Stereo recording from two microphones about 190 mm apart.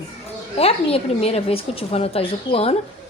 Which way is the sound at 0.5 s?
30° left (ahead or behind).